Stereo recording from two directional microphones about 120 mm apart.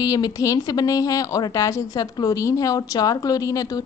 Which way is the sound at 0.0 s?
30° left (ahead or behind).